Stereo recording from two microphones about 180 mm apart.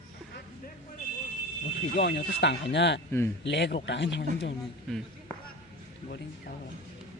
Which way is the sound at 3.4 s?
75° left (ahead or behind).